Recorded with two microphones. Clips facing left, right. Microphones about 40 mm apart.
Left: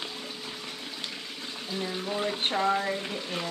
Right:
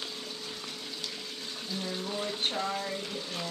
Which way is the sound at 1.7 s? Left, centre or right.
Left.